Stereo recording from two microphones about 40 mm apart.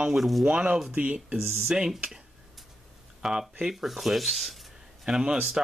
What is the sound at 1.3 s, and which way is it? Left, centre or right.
Speech, centre.